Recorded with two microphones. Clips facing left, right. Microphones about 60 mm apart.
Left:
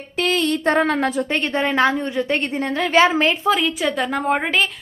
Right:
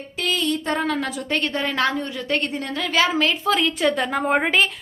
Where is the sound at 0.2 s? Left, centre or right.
Left.